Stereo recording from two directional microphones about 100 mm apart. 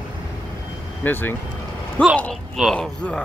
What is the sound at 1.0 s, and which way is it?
Speech, 20° left (ahead or behind).